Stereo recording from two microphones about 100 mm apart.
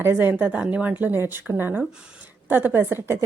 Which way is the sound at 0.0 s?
20° right (ahead or behind).